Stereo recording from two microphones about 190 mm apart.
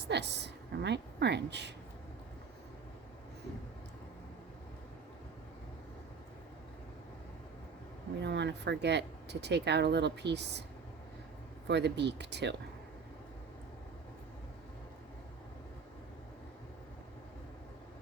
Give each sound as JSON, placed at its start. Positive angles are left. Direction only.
{"t": 0.1, "sound": "speech", "side_deg": -65}
{"t": 8.2, "sound": "speech", "side_deg": -65}
{"t": 11.7, "sound": "speech", "side_deg": -65}